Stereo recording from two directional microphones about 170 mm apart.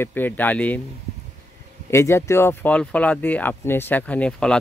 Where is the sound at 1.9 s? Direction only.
15° left (ahead or behind).